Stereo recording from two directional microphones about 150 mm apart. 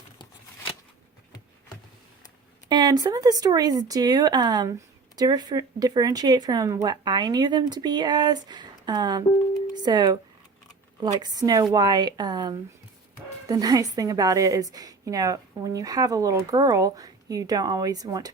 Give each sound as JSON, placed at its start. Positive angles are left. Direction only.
{"t": 2.6, "sound": "a woman's voice", "side_deg": -30}